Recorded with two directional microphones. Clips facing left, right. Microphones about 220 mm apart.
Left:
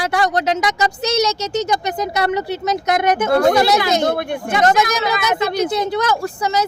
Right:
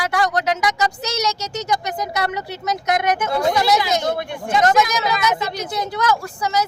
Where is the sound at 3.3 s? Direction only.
60° left (ahead or behind).